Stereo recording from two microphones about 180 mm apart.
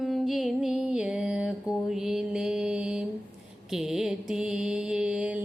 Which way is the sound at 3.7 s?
Centre (ahead or behind).